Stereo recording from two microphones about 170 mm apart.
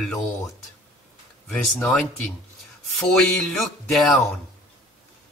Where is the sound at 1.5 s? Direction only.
5° left (ahead or behind).